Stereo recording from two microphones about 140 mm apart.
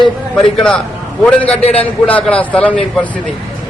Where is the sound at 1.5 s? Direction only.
45° left (ahead or behind).